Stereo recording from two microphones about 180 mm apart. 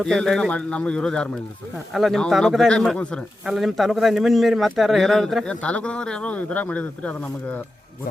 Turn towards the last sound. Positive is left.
turn(degrees=10)  # may be behind; listen again after turning